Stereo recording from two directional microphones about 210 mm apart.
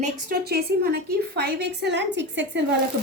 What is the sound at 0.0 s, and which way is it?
A woman's voice, 45° right (ahead or behind).